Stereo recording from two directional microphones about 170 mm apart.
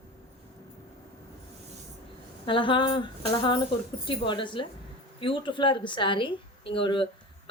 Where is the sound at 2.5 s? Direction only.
30° left (ahead or behind).